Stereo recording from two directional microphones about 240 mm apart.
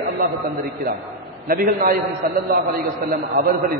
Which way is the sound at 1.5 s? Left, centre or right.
Right.